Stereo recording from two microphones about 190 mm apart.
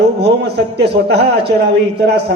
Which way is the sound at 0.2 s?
60° right (ahead or behind).